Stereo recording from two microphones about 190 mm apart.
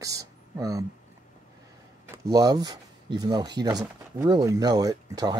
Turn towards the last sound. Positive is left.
turn(degrees=-20)  # may be behind; listen again after turning